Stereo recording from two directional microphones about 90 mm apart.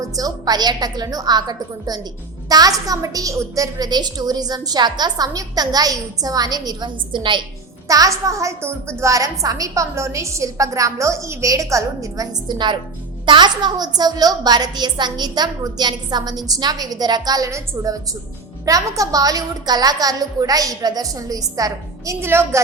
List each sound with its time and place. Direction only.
0.2 s a woman's voice: 45° right (ahead or behind); by 7.4 s 65° right (ahead or behind)
7.9 s a woman's voice: 40° right (ahead or behind)
22.2 s a woman's voice: 30° right (ahead or behind)